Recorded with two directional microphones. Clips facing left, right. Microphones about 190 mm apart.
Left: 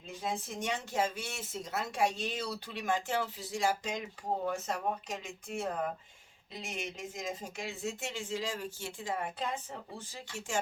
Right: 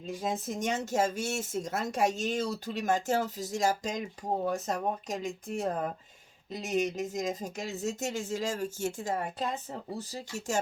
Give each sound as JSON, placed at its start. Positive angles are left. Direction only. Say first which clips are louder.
{"t": 0.3, "sound": "speech", "louder": "right 3 dB", "side_deg": -40}